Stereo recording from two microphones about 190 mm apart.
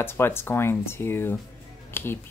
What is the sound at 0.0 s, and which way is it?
Speech, 10° left (ahead or behind).